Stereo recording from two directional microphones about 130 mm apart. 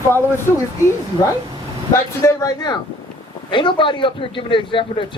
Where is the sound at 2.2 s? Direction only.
25° left (ahead or behind).